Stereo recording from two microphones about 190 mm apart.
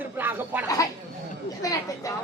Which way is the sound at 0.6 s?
15° left (ahead or behind).